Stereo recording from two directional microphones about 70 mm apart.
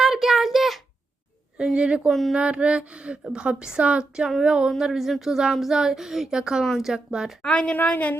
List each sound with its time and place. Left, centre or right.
0.0 s a sound: centre
1.5 s a woman's voice: centre
2.0 s speech: centre
2.3 s a woman's voice: centre
7.4 s a woman's voice: centre